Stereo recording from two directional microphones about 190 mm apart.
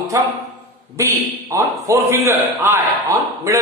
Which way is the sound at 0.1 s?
15° right (ahead or behind).